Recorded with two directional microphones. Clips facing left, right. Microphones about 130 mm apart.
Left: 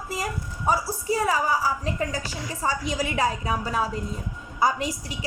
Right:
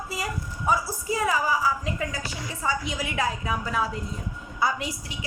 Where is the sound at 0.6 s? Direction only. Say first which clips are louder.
Left 1 dB; 30° left (ahead or behind).